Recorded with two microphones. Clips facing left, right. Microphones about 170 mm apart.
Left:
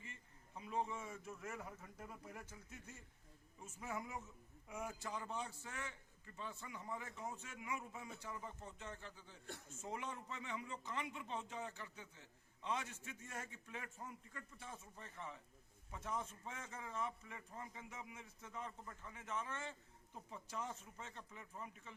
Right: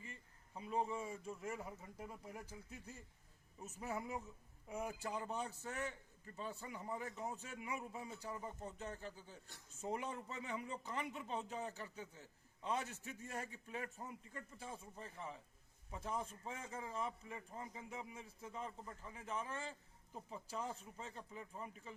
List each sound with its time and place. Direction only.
0.0 s a sound: 35° right (ahead or behind)
1.2 s a man's voice: 30° right (ahead or behind)
9.5 s a man's voice: 70° left (ahead or behind)
9.8 s a man's voice: 35° right (ahead or behind)
14.0 s a man's voice: 25° right (ahead or behind)